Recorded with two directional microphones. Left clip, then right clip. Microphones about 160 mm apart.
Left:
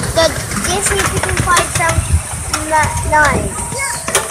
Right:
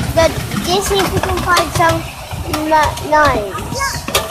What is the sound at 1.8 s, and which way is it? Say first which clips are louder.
Speech: right 3 dB; 50° right (ahead or behind).